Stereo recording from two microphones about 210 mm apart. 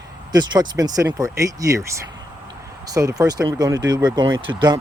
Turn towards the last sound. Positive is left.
turn(degrees=-20)  # may be behind; listen again after turning